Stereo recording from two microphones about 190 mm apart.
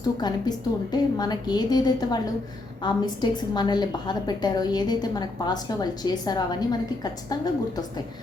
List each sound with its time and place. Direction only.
0.2 s a woman's voice: 20° left (ahead or behind)